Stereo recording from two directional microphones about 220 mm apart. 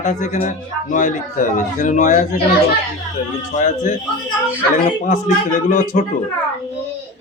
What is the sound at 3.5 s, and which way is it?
Speech, 35° left (ahead or behind).